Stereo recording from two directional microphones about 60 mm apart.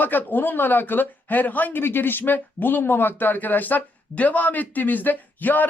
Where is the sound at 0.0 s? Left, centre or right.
Left.